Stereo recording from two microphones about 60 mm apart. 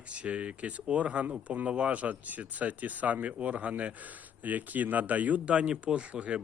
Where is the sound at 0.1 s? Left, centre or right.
Right.